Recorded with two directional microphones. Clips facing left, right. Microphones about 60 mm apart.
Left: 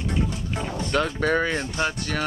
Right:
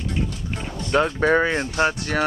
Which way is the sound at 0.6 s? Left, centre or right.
Centre.